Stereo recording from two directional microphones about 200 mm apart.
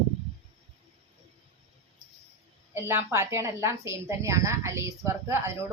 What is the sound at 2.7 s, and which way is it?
A woman's voice, 10° right (ahead or behind).